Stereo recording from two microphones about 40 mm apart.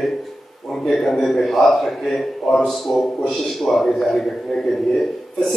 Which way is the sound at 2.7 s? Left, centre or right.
Centre.